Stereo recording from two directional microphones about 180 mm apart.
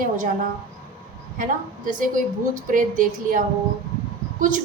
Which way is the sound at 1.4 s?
50° right (ahead or behind).